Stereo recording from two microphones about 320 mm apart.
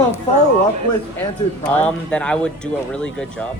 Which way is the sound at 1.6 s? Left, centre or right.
Centre.